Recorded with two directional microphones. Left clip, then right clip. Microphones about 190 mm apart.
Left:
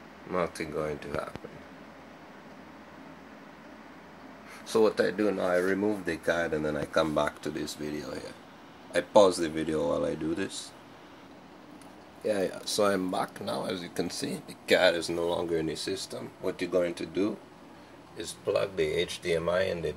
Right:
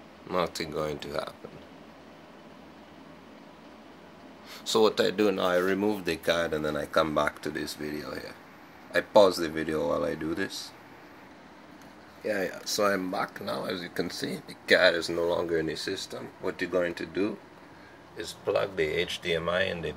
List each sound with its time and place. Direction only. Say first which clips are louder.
0.4 s speech: right 1 dB; 25° right (ahead or behind)
4.6 s speech: right 1 dB; 25° right (ahead or behind)
5.4 s speech: right 1 dB; 15° right (ahead or behind)
5.9 s speech: right 2 dB; 5° right (ahead or behind)
12.2 s speech: left 1 dB; 15° left (ahead or behind)